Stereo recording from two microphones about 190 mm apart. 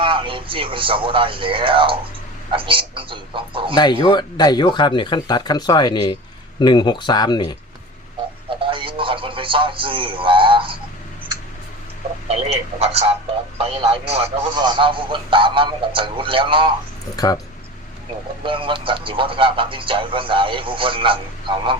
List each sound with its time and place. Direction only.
0.0 s a man's voice: 25° right (ahead or behind)
4.0 s speech: 25° left (ahead or behind)
8.4 s a man's voice: 25° right (ahead or behind)
12.3 s a man's voice: 30° right (ahead or behind)
17.2 s speech: 20° left (ahead or behind)
18.4 s a man's voice: 25° right (ahead or behind)